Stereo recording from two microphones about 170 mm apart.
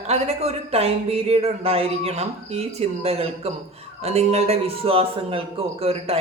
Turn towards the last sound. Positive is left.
turn(degrees=-35)  # may be behind; listen again after turning